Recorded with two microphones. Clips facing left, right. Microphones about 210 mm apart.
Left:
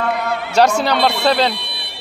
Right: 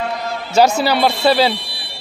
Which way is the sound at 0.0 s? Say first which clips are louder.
Left 3 dB; 60° left (ahead or behind).